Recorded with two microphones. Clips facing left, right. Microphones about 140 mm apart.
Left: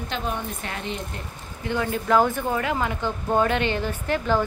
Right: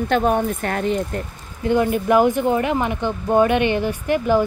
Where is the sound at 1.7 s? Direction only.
15° right (ahead or behind).